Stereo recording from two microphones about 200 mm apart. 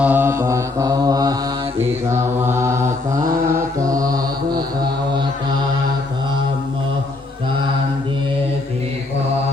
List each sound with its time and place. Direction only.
0.0 s mantra: 10° right (ahead or behind)